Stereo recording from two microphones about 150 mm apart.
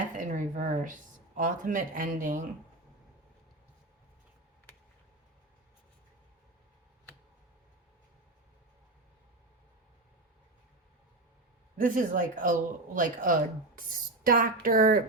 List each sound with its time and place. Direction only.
0.2 s speech: 60° right (ahead or behind)
11.8 s speech: 65° right (ahead or behind)